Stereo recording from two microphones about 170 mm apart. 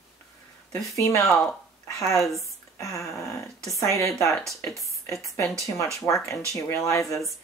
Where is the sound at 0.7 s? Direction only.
20° left (ahead or behind).